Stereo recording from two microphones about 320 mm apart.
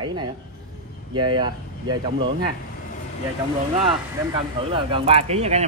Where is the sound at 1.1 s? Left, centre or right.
Right.